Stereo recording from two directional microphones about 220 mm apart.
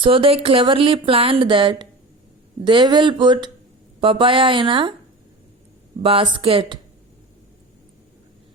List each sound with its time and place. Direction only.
0.0 s speech: 25° right (ahead or behind)
6.0 s speech: 25° right (ahead or behind)